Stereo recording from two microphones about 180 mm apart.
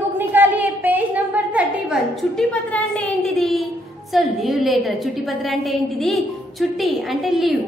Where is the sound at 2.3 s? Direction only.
5° left (ahead or behind).